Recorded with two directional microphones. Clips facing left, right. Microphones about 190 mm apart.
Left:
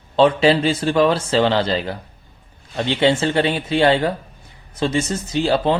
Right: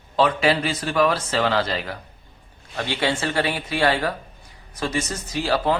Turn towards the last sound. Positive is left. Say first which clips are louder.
# left 4 dB
turn(degrees=25)  # may be behind; listen again after turning